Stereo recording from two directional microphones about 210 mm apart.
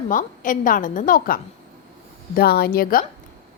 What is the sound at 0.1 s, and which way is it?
A woman's voice, 40° left (ahead or behind).